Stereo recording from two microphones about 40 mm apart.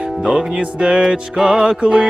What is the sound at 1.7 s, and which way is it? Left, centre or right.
Music, right.